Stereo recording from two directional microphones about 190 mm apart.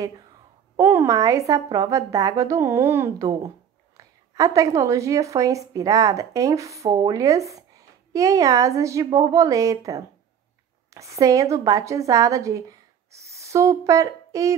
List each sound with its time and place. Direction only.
0.7 s a woman's voice: 15° right (ahead or behind)